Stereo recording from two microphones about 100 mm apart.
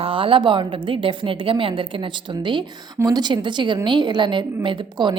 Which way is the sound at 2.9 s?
40° right (ahead or behind).